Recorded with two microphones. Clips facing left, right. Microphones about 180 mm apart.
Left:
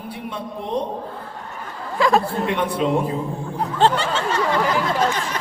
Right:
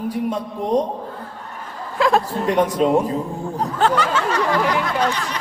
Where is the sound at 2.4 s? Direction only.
40° right (ahead or behind).